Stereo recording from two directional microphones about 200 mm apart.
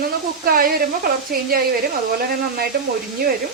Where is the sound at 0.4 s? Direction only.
45° right (ahead or behind).